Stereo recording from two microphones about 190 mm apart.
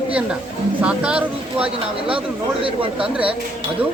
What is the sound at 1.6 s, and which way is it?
Speech, 30° right (ahead or behind).